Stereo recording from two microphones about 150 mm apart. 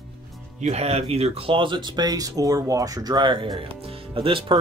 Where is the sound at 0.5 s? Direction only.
50° right (ahead or behind).